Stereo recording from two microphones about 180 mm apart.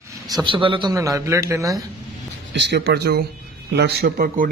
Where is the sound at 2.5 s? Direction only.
75° right (ahead or behind).